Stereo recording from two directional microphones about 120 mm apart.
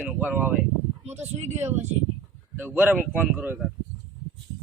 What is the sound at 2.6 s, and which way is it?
Speech, 15° right (ahead or behind).